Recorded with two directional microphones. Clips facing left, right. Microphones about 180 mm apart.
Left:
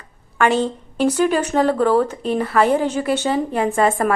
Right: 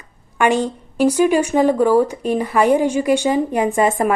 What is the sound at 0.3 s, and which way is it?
A woman's voice, 15° right (ahead or behind).